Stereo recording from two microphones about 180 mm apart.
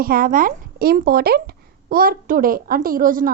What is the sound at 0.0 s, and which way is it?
Speech, 55° right (ahead or behind).